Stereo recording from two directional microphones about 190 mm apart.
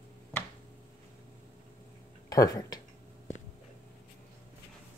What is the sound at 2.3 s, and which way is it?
Speech, 20° left (ahead or behind).